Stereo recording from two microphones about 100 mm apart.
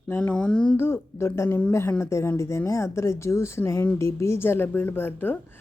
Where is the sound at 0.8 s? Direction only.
25° left (ahead or behind).